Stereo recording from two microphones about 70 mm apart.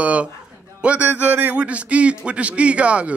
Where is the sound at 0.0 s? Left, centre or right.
Centre.